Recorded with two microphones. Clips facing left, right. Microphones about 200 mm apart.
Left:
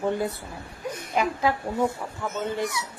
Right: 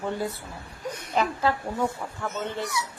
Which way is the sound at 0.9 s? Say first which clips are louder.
Left 1 dB; 15° left (ahead or behind).